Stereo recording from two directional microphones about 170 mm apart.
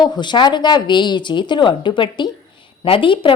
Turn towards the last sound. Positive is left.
turn(degrees=30)  # may be behind; listen again after turning